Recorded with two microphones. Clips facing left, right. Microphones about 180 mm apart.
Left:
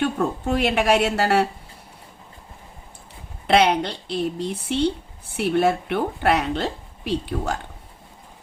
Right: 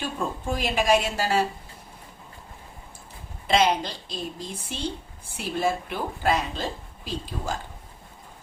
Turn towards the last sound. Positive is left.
turn(degrees=65)  # may be behind; listen again after turning